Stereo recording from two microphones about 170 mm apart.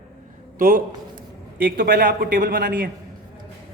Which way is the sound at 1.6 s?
55° right (ahead or behind).